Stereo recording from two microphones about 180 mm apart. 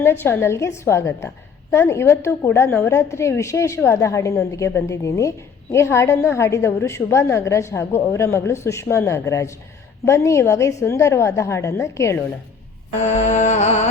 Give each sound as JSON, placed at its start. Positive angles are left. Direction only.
{"t": 0.0, "sound": "a woman's voice", "side_deg": 15}
{"t": 13.0, "sound": "music", "side_deg": 40}